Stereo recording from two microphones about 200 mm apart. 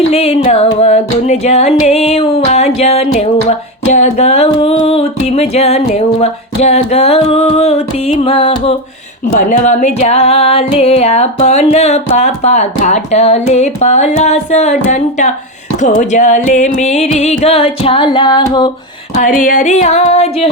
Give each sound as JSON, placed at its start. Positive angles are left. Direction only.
{"t": 0.1, "sound": "music", "side_deg": 30}
{"t": 19.1, "sound": "music", "side_deg": 40}